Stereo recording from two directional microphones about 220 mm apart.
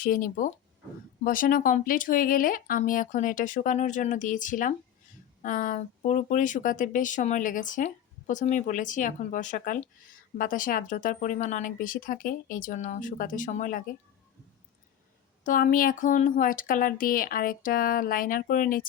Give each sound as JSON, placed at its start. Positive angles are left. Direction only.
{"t": 0.0, "sound": "speech", "side_deg": 40}
{"t": 15.4, "sound": "speech", "side_deg": 40}